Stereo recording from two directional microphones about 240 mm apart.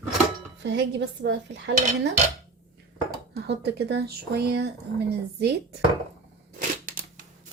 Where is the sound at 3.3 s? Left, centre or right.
Right.